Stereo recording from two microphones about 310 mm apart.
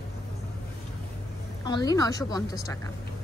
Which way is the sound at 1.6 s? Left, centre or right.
Centre.